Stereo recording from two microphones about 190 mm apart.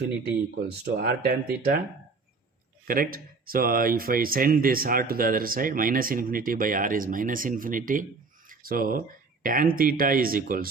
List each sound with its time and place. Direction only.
0.9 s speech: 55° right (ahead or behind)
2.8 s speech: 50° right (ahead or behind)